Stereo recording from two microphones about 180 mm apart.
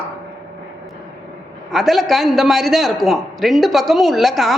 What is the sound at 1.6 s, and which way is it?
Speech, centre (ahead or behind).